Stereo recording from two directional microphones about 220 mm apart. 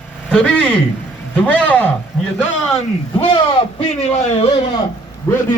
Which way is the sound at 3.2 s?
25° left (ahead or behind).